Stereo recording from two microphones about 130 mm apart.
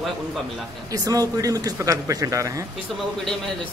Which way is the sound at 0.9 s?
25° right (ahead or behind).